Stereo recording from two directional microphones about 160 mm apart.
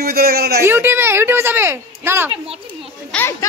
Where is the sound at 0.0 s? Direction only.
75° right (ahead or behind).